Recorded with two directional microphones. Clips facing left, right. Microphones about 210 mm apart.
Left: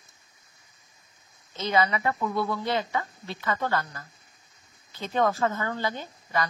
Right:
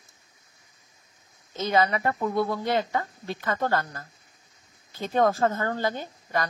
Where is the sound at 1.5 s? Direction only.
45° right (ahead or behind).